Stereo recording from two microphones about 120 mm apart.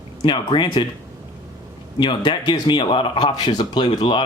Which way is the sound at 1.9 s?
40° left (ahead or behind).